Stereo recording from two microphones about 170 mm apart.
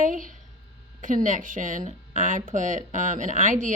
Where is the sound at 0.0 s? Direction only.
50° right (ahead or behind).